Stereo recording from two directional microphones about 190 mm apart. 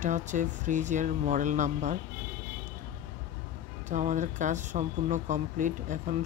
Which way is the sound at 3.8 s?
40° right (ahead or behind).